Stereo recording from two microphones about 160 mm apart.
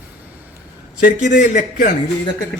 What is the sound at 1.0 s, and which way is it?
Speech, 55° left (ahead or behind).